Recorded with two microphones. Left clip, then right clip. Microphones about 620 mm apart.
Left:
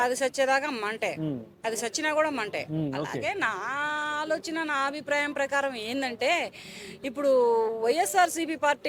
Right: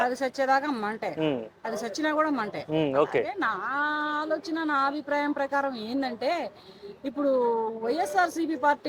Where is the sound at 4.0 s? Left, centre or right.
Left.